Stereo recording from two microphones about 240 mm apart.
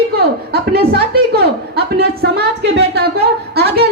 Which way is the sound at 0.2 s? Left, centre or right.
Right.